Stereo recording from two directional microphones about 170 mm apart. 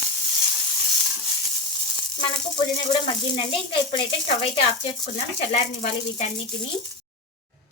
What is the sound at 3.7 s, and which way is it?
Speech, 30° left (ahead or behind).